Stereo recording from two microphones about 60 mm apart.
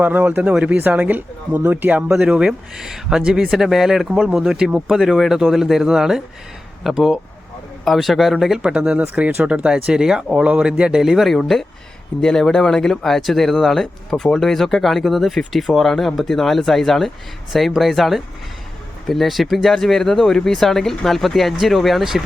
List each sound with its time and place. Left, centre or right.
0.0 s speech: right
2.0 s speech: centre
4.9 s speech: centre
8.6 s speech: centre
11.2 s speech: centre